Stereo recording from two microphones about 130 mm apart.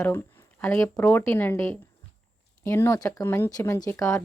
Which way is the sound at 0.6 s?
20° left (ahead or behind).